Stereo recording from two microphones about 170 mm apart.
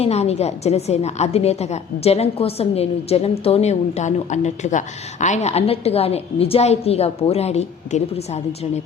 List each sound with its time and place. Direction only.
0.0 s a woman's voice: 40° left (ahead or behind)